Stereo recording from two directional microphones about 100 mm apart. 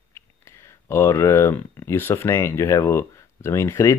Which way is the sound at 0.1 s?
25° left (ahead or behind).